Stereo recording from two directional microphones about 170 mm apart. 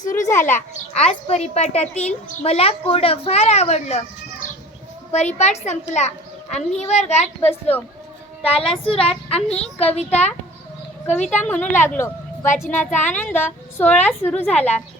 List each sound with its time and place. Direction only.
0.1 s a woman's voice: 15° left (ahead or behind)
1.0 s a woman's voice: 40° left (ahead or behind)
5.1 s a woman's voice: 40° left (ahead or behind)
11.0 s a woman's voice: 10° left (ahead or behind)
12.9 s speech: 45° left (ahead or behind)
13.1 s a woman's voice: 10° left (ahead or behind)